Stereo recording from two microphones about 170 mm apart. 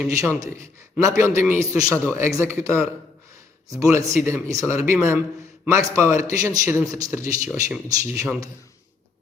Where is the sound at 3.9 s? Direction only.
15° right (ahead or behind).